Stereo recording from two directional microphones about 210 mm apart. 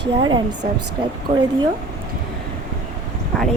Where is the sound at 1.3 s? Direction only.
30° right (ahead or behind).